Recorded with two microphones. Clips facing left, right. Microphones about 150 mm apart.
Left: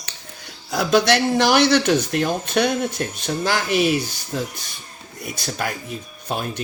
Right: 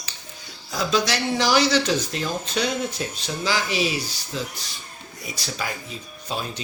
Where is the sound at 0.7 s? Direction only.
60° left (ahead or behind).